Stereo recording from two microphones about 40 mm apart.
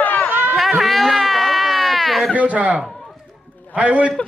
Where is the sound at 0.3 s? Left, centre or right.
Right.